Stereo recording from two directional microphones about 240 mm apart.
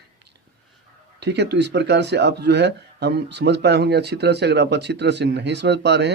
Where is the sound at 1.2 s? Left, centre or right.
Right.